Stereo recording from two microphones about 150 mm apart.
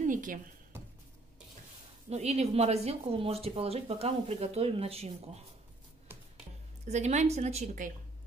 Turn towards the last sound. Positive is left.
turn(degrees=-45)  # may be behind; listen again after turning